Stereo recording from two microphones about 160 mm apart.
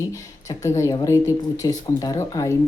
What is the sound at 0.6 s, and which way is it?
Speech, 20° left (ahead or behind).